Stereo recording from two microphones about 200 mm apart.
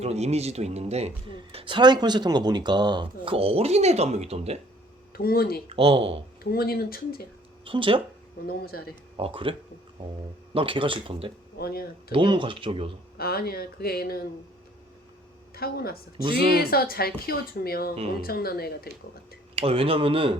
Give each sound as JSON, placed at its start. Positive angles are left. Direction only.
{"t": 0.0, "sound": "speech", "side_deg": -30}
{"t": 5.1, "sound": "speech", "side_deg": 50}
{"t": 5.6, "sound": "speech", "side_deg": -30}
{"t": 6.4, "sound": "speech", "side_deg": 50}
{"t": 7.6, "sound": "speech", "side_deg": -25}
{"t": 8.4, "sound": "speech", "side_deg": 50}
{"t": 9.1, "sound": "speech", "side_deg": -25}
{"t": 11.5, "sound": "speech", "side_deg": 50}
{"t": 12.1, "sound": "speech", "side_deg": -25}
{"t": 13.1, "sound": "speech", "side_deg": 50}
{"t": 15.5, "sound": "speech", "side_deg": 50}
{"t": 19.5, "sound": "speech", "side_deg": -30}